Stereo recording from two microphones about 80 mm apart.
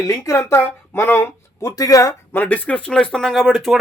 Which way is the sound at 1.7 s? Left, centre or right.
Left.